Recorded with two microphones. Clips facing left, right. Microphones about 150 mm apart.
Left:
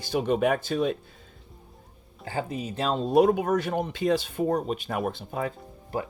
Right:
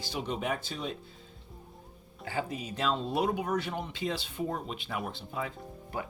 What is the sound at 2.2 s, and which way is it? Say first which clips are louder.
Speech: left 4 dB; 30° left (ahead or behind).